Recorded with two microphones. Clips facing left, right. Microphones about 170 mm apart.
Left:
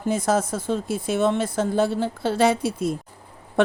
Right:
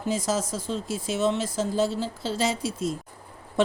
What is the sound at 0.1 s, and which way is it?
Speech, 55° left (ahead or behind).